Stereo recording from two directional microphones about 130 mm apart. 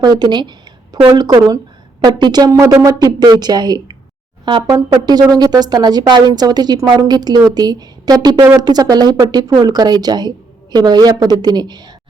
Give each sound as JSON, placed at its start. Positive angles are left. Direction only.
{"t": 0.0, "sound": "speech", "side_deg": -30}